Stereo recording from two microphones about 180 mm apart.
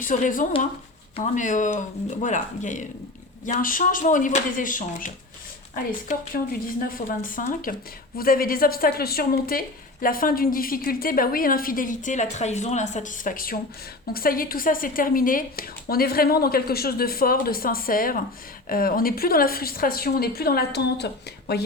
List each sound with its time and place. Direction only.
0.0 s a woman's voice: 45° left (ahead or behind); by 21.6 s 65° left (ahead or behind)